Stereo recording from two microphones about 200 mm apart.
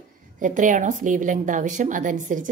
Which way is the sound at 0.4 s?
40° right (ahead or behind).